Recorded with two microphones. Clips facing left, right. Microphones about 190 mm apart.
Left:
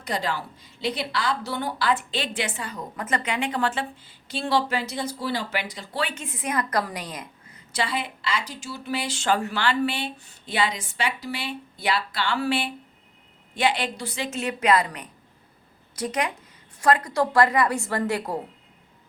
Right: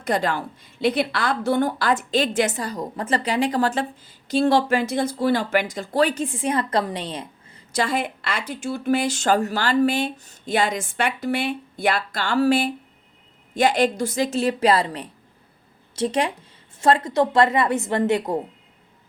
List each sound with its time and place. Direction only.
0.0 s a woman's voice: 55° right (ahead or behind); by 7.6 s 30° right (ahead or behind)
7.7 s a woman's voice: 45° right (ahead or behind); by 18.3 s 20° right (ahead or behind)